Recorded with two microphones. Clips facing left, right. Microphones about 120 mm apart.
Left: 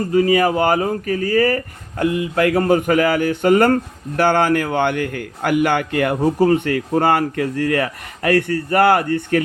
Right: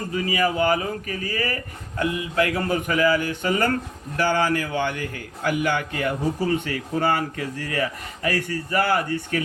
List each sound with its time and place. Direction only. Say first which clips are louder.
0.1 s a man's voice: left 8 dB; 45° left (ahead or behind)